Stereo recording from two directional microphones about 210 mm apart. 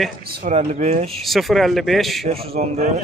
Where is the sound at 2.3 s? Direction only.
30° right (ahead or behind).